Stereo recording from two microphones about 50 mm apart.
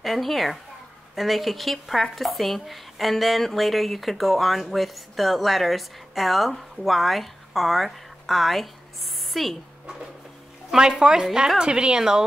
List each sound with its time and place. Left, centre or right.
0.0 s a woman's voice: centre
10.7 s a woman's voice: centre